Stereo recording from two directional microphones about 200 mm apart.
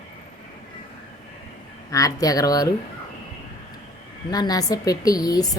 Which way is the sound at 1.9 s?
15° left (ahead or behind).